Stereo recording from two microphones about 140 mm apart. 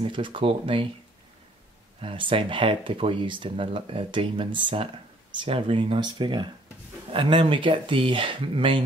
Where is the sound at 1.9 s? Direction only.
40° right (ahead or behind).